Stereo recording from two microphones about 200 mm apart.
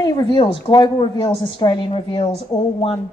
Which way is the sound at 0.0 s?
20° left (ahead or behind).